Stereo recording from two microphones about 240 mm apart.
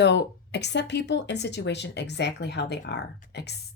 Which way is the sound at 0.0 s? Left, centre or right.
Left.